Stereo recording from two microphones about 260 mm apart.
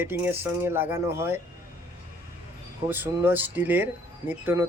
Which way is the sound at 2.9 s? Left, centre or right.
Centre.